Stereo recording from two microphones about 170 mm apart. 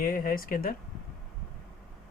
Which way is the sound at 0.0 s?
55° left (ahead or behind).